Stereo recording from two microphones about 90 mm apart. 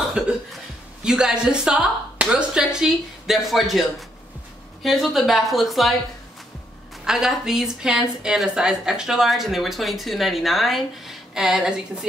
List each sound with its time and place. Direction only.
0.2 s cough: 10° right (ahead or behind)
1.0 s speech: 10° right (ahead or behind)
4.8 s a woman's voice: centre (ahead or behind)
7.1 s a woman's voice: 5° right (ahead or behind)